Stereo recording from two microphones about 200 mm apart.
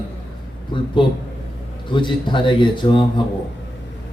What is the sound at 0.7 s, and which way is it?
Speech, 25° left (ahead or behind).